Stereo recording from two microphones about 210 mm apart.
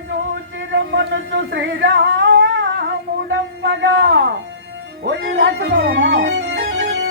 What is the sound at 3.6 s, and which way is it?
Male singing, 60° right (ahead or behind).